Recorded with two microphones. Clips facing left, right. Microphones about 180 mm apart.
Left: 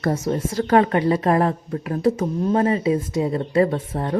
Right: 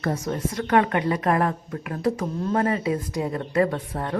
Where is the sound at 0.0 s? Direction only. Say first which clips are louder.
Left 4 dB; 30° left (ahead or behind).